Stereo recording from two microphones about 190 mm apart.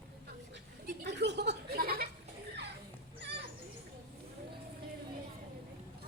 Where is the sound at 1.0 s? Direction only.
65° right (ahead or behind).